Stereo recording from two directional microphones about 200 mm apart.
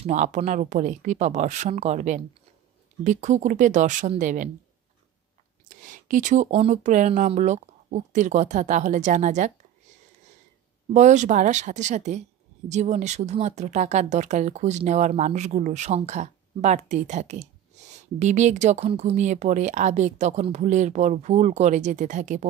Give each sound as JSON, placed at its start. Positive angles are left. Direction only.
{"t": 0.0, "sound": "speech", "side_deg": -35}
{"t": 5.7, "sound": "speech", "side_deg": -40}
{"t": 10.9, "sound": "speech", "side_deg": -35}